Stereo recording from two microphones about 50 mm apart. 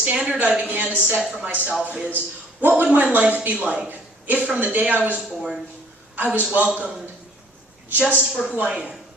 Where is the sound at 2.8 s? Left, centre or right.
Right.